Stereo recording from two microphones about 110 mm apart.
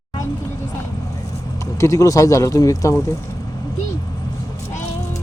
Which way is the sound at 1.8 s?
30° left (ahead or behind).